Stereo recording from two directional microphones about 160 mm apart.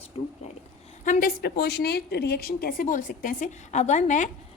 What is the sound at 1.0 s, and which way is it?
A woman's voice, 60° left (ahead or behind).